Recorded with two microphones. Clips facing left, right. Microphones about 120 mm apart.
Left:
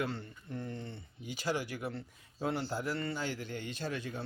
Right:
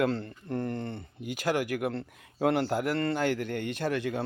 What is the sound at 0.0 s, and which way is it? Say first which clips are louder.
Speech: right 9 dB; 85° right.